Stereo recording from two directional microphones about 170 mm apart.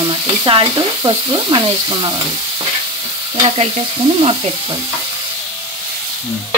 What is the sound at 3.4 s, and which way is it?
Stir, 35° right (ahead or behind).